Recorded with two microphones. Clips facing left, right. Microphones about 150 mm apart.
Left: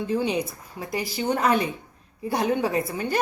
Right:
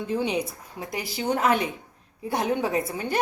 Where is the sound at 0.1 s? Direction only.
20° right (ahead or behind).